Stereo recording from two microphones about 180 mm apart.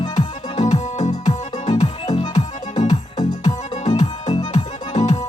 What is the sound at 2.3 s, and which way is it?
Music, 40° left (ahead or behind).